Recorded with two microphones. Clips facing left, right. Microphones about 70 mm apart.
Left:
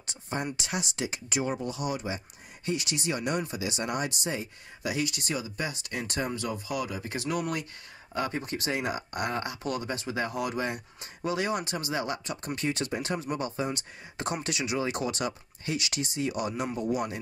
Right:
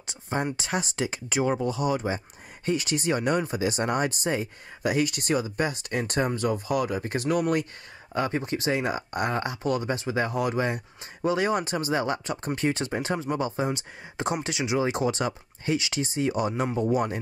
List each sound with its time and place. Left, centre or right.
0.0 s speech: right
8.1 s speech: right